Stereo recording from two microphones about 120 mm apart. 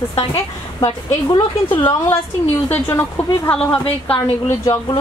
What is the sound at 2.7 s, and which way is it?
A woman's voice, 20° left (ahead or behind).